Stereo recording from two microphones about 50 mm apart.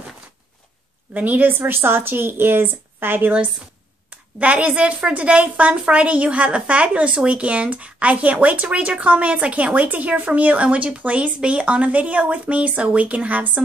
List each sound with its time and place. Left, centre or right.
1.1 s a woman's voice: right
1.6 s a woman's voice: right
4.4 s a woman's voice: right